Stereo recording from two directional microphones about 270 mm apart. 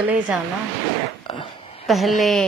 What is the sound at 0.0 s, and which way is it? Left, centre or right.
Speech, centre.